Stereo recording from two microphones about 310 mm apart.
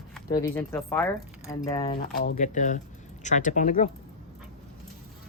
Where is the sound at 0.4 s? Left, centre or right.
Centre; by 3.8 s left.